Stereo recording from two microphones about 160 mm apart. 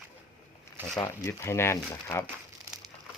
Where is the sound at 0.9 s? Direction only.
20° left (ahead or behind).